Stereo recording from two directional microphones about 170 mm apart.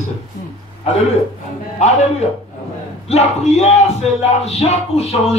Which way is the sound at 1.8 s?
45° left (ahead or behind).